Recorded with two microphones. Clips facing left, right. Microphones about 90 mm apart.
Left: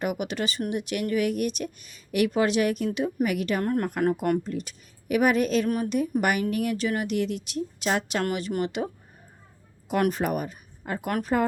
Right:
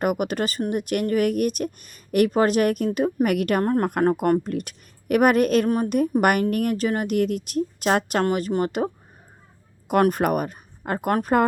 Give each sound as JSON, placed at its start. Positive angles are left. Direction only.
{"t": 0.0, "sound": "speech", "side_deg": -50}
{"t": 3.2, "sound": "speech", "side_deg": -55}
{"t": 3.6, "sound": "a woman's voice", "side_deg": -40}
{"t": 5.6, "sound": "a woman's voice", "side_deg": -35}
{"t": 5.9, "sound": "a woman's voice", "side_deg": -50}
{"t": 10.0, "sound": "speech", "side_deg": -55}